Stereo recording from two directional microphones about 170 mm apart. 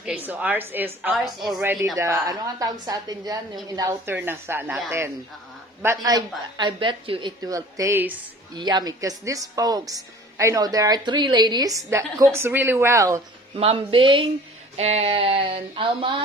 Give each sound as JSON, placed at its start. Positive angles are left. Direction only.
{"t": 0.0, "sound": "a woman's voice", "side_deg": -10}
{"t": 1.1, "sound": "a woman's voice", "side_deg": 0}
{"t": 1.6, "sound": "a woman's voice", "side_deg": -15}
{"t": 8.5, "sound": "a woman's voice", "side_deg": -25}
{"t": 13.6, "sound": "a sound", "side_deg": -35}